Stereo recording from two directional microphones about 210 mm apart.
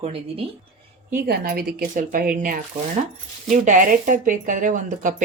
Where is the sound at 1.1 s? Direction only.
45° right (ahead or behind).